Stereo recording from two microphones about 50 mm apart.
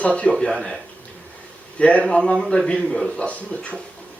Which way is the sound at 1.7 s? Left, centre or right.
Left.